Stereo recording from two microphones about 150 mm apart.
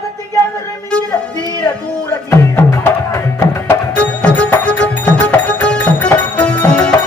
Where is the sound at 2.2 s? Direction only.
20° left (ahead or behind).